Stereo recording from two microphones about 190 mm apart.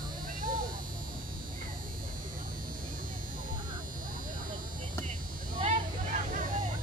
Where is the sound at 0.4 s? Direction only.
45° right (ahead or behind).